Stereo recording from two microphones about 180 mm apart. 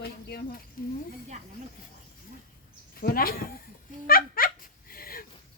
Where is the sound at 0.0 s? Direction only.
60° left (ahead or behind).